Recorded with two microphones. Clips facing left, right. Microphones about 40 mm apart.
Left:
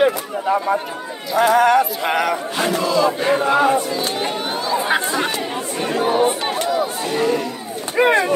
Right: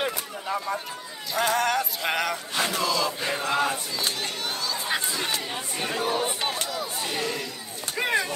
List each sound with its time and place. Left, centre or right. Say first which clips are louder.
0.0 s speech: left 12 dB; left
4.2 s chatter: left 8 dB; left
5.8 s speech: left 9 dB; left
6.6 s a sound: left 11 dB; centre
7.2 s speech: left 11 dB; left